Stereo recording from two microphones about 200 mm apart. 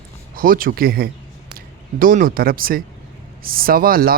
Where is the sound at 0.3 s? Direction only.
45° right (ahead or behind).